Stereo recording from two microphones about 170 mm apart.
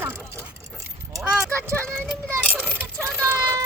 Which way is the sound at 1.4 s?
15° right (ahead or behind).